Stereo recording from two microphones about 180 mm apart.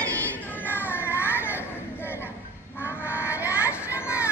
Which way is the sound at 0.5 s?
10° left (ahead or behind).